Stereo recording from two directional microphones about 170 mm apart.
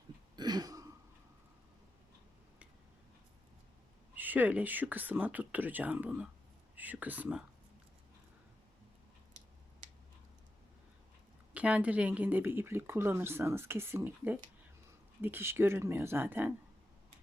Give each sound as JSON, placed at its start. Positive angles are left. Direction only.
{"t": 0.3, "sound": "throat clearing", "side_deg": -25}
{"t": 4.1, "sound": "a woman's voice", "side_deg": -10}
{"t": 11.5, "sound": "a woman's voice", "side_deg": -10}